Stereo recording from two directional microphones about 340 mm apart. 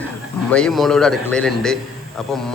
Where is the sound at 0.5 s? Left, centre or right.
Centre.